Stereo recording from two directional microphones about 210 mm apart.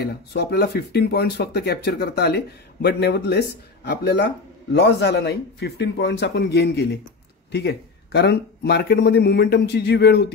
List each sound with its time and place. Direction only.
0.0 s speech: 50° left (ahead or behind)